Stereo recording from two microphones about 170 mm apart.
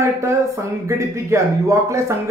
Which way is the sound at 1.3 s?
20° right (ahead or behind).